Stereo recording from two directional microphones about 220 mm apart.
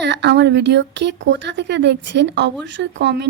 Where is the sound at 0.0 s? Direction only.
50° right (ahead or behind).